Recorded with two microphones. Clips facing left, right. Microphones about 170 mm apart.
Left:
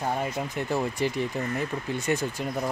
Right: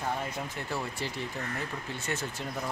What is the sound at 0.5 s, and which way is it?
Speech, 15° left (ahead or behind).